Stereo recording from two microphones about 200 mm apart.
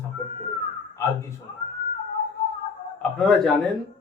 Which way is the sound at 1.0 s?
15° left (ahead or behind).